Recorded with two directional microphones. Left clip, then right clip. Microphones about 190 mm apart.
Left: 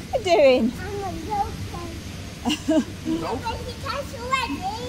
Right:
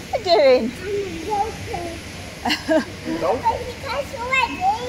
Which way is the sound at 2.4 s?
45° left (ahead or behind).